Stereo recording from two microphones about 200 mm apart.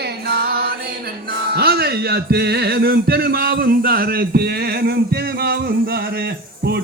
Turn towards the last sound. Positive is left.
turn(degrees=-55)  # may be behind; listen again after turning